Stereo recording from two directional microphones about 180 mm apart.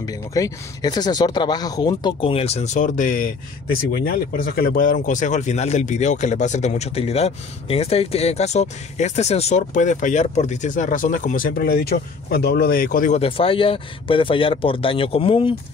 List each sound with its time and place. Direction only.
0.0 s speech: 20° left (ahead or behind); by 13.2 s 50° left (ahead or behind)
13.2 s speech: 30° left (ahead or behind)